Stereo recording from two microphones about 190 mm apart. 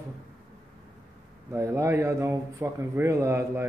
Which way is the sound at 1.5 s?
15° right (ahead or behind).